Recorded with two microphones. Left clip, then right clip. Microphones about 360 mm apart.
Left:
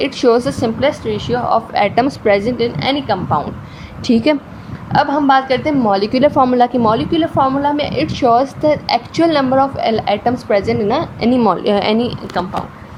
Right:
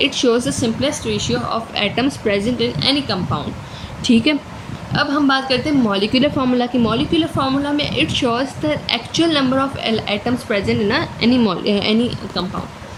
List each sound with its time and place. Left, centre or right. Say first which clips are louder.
0.0 s a woman's voice: left 3 dB; centre
4.0 s a woman's voice: left 2 dB; centre
11.9 s a woman's voice: left 2 dB; left